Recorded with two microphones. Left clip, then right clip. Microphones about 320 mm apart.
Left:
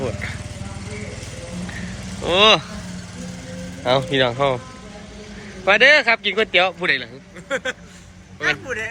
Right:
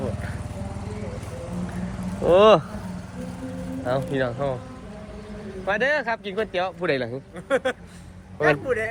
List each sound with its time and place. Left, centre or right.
2.2 s a man's voice: centre
3.8 s a man's voice: centre
5.6 s a man's voice: centre
6.9 s a man's voice: centre